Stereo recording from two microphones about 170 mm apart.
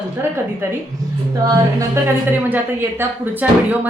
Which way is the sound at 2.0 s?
15° right (ahead or behind).